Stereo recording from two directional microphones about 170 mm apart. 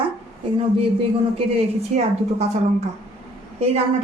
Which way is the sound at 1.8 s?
40° right (ahead or behind).